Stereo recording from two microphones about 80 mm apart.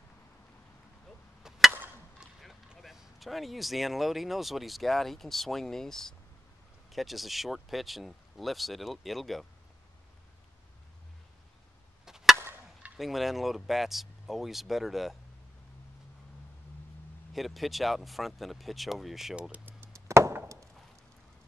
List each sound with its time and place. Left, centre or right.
2.1 s speech: centre
12.0 s chop: centre
12.9 s speech: centre
17.3 s speech: centre
19.5 s chop: right
19.9 s chop: right